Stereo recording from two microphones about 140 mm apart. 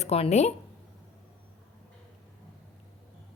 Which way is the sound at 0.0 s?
50° left (ahead or behind).